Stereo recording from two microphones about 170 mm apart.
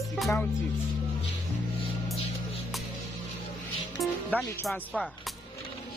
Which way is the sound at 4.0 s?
Centre (ahead or behind).